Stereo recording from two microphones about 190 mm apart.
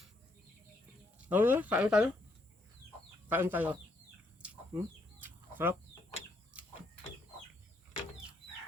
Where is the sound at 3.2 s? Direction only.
10° right (ahead or behind).